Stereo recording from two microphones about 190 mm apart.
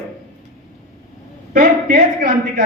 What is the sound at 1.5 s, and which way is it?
A man's voice, 50° right (ahead or behind).